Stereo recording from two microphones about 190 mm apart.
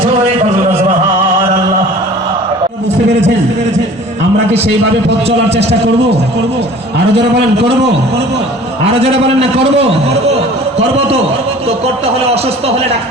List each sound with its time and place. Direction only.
5.5 s a man's voice: 60° right (ahead or behind)
8.9 s a man's voice: 30° right (ahead or behind)